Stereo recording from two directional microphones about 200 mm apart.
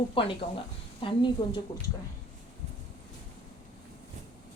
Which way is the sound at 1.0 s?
25° left (ahead or behind).